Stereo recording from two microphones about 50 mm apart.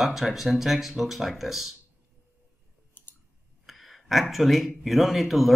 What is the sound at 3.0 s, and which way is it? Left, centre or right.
Clicking, left.